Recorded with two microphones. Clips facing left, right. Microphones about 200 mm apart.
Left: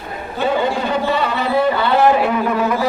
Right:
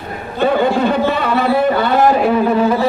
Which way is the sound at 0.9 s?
55° right (ahead or behind).